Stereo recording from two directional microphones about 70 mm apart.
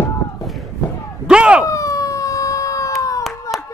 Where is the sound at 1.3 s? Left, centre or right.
Centre.